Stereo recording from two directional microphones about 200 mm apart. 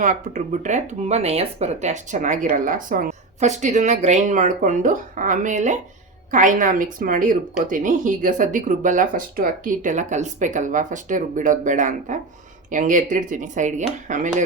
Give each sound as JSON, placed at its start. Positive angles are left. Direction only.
{"t": 0.0, "sound": "speech", "side_deg": -40}